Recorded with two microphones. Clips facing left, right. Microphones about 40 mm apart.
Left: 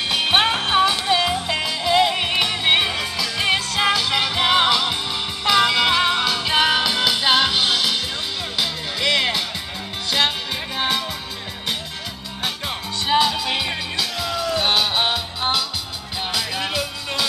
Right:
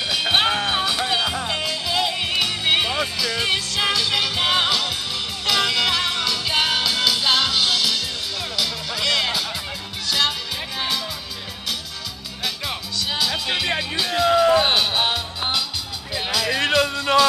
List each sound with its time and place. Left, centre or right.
0.1 s music: left
12.6 s music: left
13.9 s music: right
14.8 s music: centre
16.5 s music: right